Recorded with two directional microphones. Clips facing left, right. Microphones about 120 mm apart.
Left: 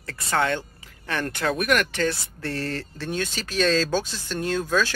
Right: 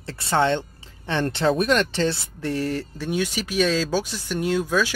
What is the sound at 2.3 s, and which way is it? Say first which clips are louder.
Speech: right 4 dB; 15° right (ahead or behind).